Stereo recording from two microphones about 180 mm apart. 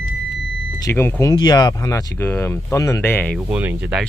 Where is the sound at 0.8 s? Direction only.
15° left (ahead or behind).